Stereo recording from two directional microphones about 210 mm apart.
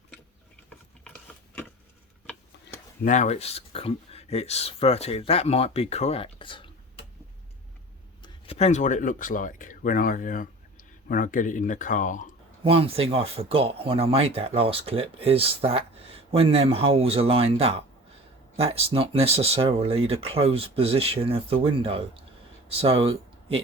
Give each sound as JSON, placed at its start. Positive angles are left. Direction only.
{"t": 3.0, "sound": "speech", "side_deg": 35}
{"t": 8.2, "sound": "speech", "side_deg": 30}
{"t": 12.6, "sound": "speech", "side_deg": -25}